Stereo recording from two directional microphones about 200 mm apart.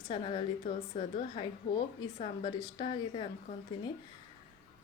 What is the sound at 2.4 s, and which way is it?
Speech, 25° left (ahead or behind).